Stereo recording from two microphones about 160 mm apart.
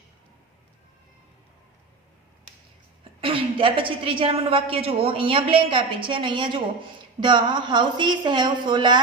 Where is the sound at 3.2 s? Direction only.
35° right (ahead or behind).